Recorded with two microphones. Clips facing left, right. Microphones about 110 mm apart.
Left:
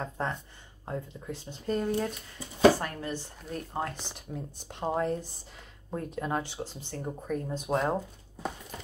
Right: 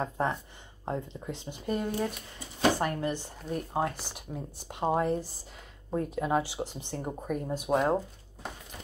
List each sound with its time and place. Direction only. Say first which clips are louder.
0.2 s speech: right 3 dB; 15° right (ahead or behind)
1.7 s speech: left 1 dB; 5° right (ahead or behind)
2.8 s speech: right 5 dB; 20° right (ahead or behind)